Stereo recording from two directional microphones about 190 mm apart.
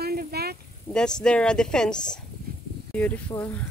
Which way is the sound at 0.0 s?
55° right (ahead or behind).